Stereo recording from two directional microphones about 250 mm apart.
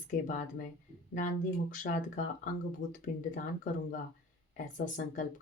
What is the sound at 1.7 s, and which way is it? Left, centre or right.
Speech, left.